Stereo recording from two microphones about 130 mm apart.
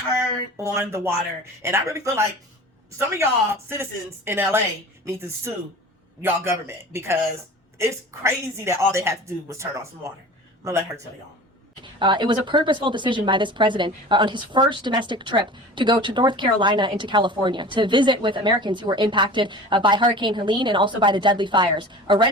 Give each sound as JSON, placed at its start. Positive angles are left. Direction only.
{"t": 0.5, "sound": "a woman's voice", "side_deg": -20}
{"t": 6.2, "sound": "a woman's voice", "side_deg": -20}
{"t": 11.8, "sound": "speech", "side_deg": -35}